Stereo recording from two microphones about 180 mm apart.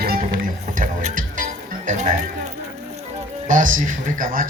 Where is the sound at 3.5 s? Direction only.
45° right (ahead or behind).